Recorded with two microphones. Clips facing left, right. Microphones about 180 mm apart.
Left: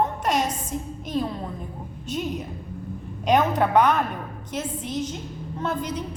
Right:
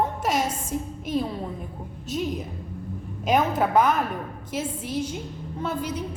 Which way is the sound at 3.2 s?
5° right (ahead or behind).